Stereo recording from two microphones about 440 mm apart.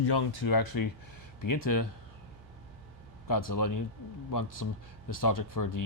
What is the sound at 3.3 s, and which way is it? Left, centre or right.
Speech, left.